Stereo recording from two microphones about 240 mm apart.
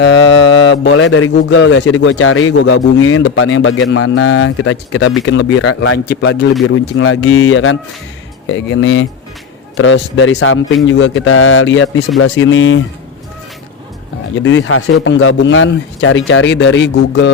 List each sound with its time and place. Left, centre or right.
0.0 s a man's voice: left
6.1 s speech: left
14.3 s speech: left